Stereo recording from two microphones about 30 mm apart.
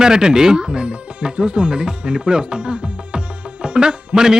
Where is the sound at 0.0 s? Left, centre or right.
Right.